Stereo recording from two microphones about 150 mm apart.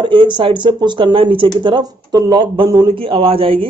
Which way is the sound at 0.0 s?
35° right (ahead or behind).